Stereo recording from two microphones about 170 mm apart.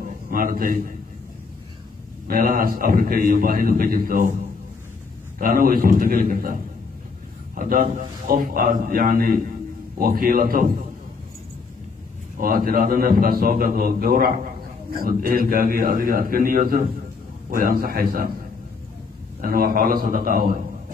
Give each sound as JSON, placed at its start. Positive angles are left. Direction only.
{"t": 0.0, "sound": "a sound", "side_deg": -55}
{"t": 2.2, "sound": "a man's voice", "side_deg": -60}
{"t": 5.4, "sound": "a man's voice", "side_deg": -55}
{"t": 12.4, "sound": "a man's voice", "side_deg": -60}
{"t": 19.4, "sound": "a man's voice", "side_deg": -60}